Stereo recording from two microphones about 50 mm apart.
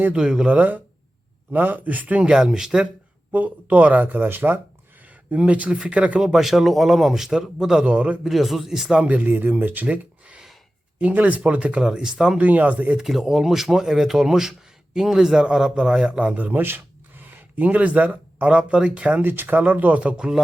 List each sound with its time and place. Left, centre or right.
0.1 s speech: centre
0.5 s speech: right
2.2 s speech: centre
3.3 s speech: right
5.3 s speech: right
6.2 s speech: centre; by 8.2 s right
8.2 s speech: centre
9.0 s speech: right
9.8 s a sound: right
11.0 s speech: right
11.8 s speech: centre
12.4 s speech: right
13.0 s a man's voice: centre; by 19.2 s right
19.2 s speech: right; by 20.4 s centre